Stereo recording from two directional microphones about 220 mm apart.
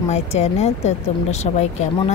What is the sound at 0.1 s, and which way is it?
Speech, 30° left (ahead or behind).